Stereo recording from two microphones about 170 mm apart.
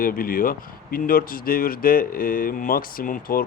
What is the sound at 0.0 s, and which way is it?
Speech, 55° left (ahead or behind).